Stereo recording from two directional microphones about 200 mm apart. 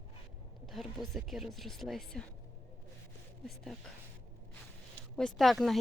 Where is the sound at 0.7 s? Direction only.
Centre (ahead or behind).